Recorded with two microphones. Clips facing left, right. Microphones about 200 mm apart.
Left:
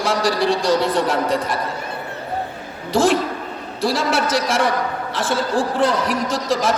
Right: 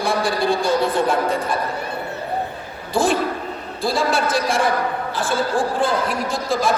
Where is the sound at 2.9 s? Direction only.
75° left (ahead or behind).